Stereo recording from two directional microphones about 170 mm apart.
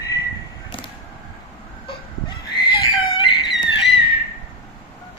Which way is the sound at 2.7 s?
30° left (ahead or behind).